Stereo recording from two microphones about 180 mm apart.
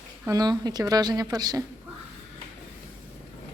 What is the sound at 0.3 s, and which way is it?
A woman's voice, 20° right (ahead or behind).